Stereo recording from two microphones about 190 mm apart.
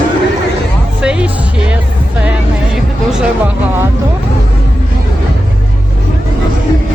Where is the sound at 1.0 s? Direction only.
5° right (ahead or behind).